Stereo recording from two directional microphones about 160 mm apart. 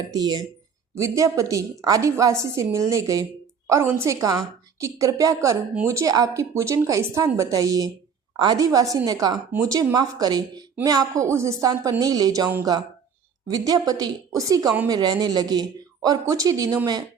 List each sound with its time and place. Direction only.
0.1 s a woman's voice: 25° right (ahead or behind)
13.5 s a woman's voice: 25° right (ahead or behind)